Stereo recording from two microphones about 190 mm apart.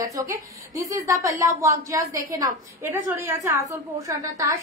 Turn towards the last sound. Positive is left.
turn(degrees=-15)  # may be behind; listen again after turning